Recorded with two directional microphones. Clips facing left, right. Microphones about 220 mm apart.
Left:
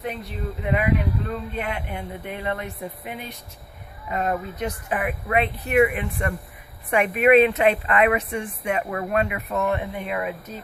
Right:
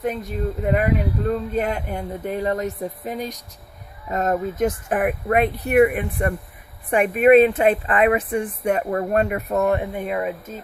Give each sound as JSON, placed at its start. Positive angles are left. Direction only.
{"t": 0.0, "sound": "speech", "side_deg": -45}
{"t": 7.9, "sound": "speech", "side_deg": -30}